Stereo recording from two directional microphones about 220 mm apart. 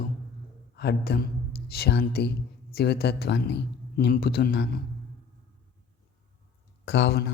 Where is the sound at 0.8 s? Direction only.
50° left (ahead or behind).